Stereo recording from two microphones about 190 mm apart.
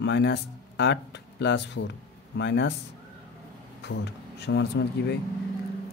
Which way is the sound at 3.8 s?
60° left (ahead or behind).